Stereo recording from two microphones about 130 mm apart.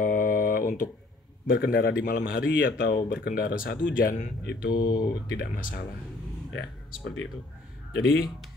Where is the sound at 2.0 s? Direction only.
90° left.